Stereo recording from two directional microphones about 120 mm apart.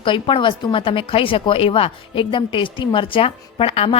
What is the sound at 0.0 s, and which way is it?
A woman's voice, 45° left (ahead or behind).